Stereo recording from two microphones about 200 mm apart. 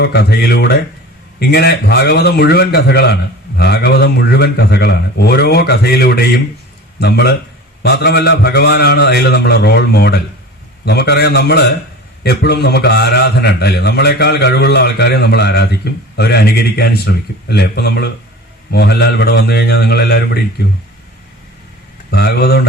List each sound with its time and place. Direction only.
0.0 s a man's voice: 55° left (ahead or behind)
22.1 s a man's voice: 55° left (ahead or behind)